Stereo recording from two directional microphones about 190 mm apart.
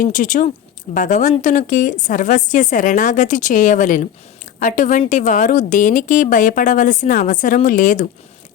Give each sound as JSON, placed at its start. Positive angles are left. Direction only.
{"t": 0.0, "sound": "a woman's voice", "side_deg": 45}